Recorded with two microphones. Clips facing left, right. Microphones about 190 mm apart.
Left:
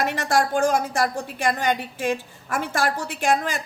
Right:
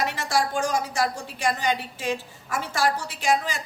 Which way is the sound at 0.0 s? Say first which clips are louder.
Left 3 dB; 55° left (ahead or behind).